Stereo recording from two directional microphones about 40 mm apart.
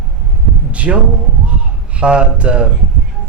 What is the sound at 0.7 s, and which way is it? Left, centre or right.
Speech, right.